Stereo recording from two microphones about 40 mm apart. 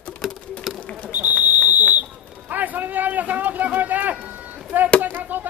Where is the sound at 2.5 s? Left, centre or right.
Right.